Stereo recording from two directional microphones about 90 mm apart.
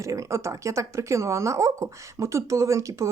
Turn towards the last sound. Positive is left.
turn(degrees=-35)  # may be behind; listen again after turning